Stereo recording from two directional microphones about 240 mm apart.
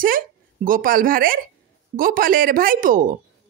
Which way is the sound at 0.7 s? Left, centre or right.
Right.